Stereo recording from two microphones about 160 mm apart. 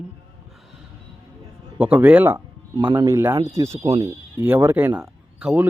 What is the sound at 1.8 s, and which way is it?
Speech, 10° right (ahead or behind).